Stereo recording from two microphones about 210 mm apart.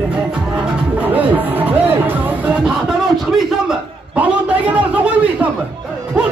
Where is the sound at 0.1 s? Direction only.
5° right (ahead or behind).